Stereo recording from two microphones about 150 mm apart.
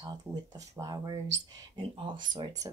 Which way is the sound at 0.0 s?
25° right (ahead or behind).